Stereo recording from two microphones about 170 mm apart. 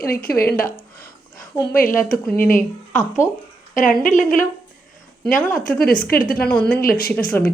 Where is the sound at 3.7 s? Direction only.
50° left (ahead or behind).